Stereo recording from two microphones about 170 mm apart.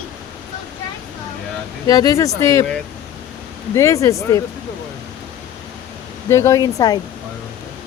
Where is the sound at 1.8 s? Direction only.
20° left (ahead or behind).